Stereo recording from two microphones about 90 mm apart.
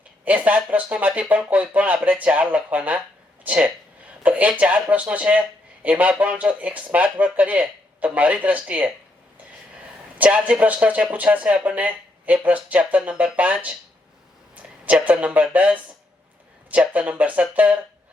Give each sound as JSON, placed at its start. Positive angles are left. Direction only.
{"t": 0.3, "sound": "speech", "side_deg": -15}
{"t": 10.2, "sound": "speech", "side_deg": -15}